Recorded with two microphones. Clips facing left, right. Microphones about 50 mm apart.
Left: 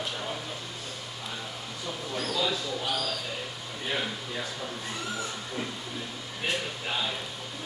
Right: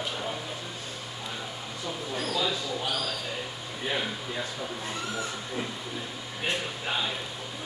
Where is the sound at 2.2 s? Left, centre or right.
Centre.